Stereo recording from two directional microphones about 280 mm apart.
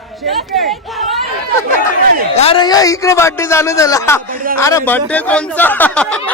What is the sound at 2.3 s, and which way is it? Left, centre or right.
A man's voice, centre.